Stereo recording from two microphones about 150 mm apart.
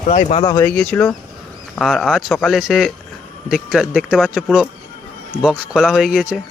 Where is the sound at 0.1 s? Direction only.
50° left (ahead or behind).